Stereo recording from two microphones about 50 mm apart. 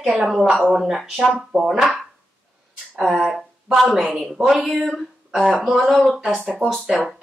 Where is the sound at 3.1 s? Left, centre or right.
Centre.